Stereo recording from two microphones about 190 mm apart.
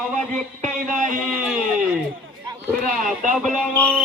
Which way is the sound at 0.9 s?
45° right (ahead or behind).